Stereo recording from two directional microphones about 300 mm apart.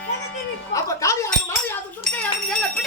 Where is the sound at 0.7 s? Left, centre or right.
Centre.